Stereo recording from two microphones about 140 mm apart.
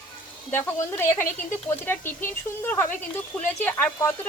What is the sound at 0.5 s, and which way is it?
Speech, 15° left (ahead or behind).